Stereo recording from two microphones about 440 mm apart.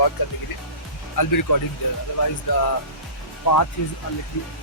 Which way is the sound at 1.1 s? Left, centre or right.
Left.